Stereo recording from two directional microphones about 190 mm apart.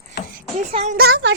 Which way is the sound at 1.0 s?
55° right (ahead or behind).